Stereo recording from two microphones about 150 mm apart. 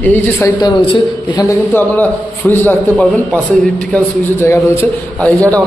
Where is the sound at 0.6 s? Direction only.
30° left (ahead or behind); by 4.5 s 15° left (ahead or behind).